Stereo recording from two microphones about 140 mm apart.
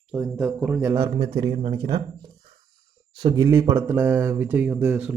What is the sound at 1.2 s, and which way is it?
Speech, 30° right (ahead or behind).